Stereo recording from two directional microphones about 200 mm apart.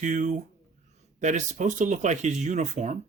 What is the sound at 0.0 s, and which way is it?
Speech, 40° right (ahead or behind).